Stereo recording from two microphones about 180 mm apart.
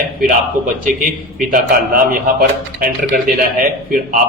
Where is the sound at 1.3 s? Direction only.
50° right (ahead or behind).